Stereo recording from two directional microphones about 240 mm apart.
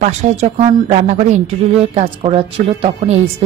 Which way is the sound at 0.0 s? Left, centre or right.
Right.